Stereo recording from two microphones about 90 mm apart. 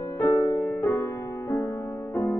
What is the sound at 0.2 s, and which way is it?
Music, 25° left (ahead or behind).